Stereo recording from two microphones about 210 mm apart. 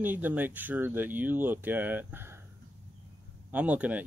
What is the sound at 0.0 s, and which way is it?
Speech, 10° right (ahead or behind).